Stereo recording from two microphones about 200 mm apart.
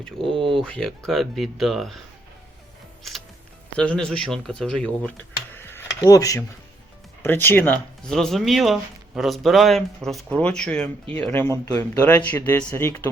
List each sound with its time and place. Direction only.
0.3 s speech: 25° right (ahead or behind)
0.6 s speech: 5° left (ahead or behind)
3.8 s speech: 5° left (ahead or behind)
5.3 s a sound: 10° left (ahead or behind)
7.2 s speech: 10° left (ahead or behind)